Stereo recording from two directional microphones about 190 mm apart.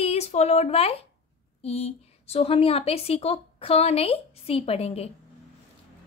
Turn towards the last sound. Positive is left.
turn(degrees=30)  # may be behind; listen again after turning